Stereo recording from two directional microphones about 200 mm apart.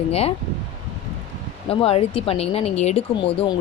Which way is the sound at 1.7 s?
30° left (ahead or behind).